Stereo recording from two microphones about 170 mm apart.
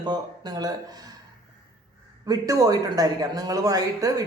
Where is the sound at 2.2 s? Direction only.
20° right (ahead or behind).